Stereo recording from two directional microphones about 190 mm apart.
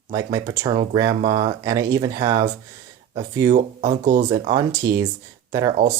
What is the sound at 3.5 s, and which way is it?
Speech, 40° right (ahead or behind).